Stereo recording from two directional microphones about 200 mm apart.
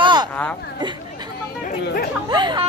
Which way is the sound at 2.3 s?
20° right (ahead or behind).